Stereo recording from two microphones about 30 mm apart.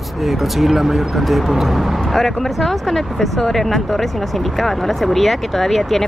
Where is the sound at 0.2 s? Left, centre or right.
Centre.